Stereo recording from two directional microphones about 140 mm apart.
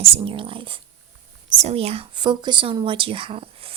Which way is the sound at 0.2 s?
40° right (ahead or behind).